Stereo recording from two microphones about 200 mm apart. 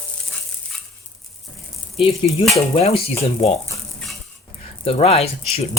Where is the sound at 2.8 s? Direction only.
30° left (ahead or behind).